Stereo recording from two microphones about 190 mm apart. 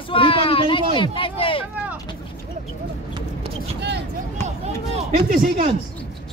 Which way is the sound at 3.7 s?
65° right (ahead or behind).